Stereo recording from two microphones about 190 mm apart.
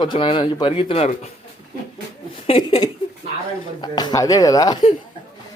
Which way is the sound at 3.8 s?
20° left (ahead or behind).